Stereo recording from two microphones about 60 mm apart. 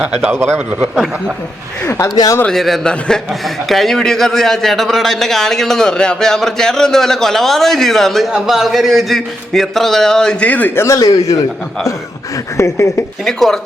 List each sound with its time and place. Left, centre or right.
0.8 s a man's voice: centre
1.8 s speech: left
2.0 s speech: left
2.5 s a man's voice: centre
2.8 s a man's voice: centre
3.4 s a man's voice: centre
10.4 s speech: left
10.8 s speech: left
12.5 s speech: left
13.2 s a man's voice: centre